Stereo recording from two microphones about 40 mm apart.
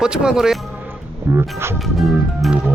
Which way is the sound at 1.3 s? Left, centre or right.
Right.